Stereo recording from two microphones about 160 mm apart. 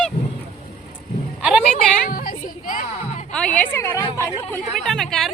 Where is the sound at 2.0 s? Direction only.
65° left (ahead or behind).